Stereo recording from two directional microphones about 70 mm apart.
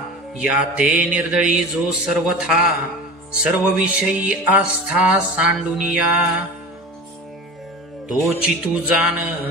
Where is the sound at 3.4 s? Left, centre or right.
Centre.